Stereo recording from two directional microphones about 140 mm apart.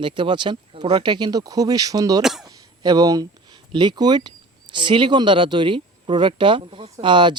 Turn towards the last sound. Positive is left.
turn(degrees=-35)  # may be behind; listen again after turning